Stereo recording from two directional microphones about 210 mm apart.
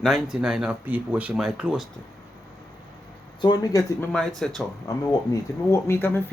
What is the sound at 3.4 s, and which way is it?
Speech, 20° left (ahead or behind).